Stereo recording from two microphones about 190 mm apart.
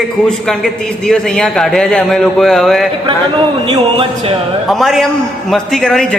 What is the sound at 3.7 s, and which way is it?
Speech, 25° right (ahead or behind).